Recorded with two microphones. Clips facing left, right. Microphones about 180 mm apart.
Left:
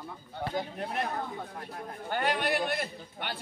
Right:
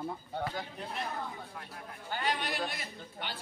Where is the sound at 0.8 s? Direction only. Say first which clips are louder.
Left 5 dB; 60° left (ahead or behind).